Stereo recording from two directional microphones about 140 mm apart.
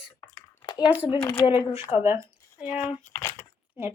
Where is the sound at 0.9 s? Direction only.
10° right (ahead or behind).